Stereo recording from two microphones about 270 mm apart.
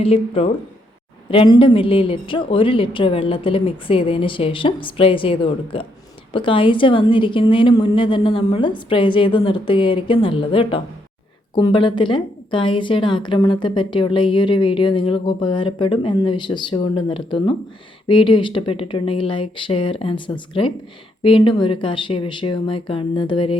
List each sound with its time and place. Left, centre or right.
0.0 s a woman's voice: left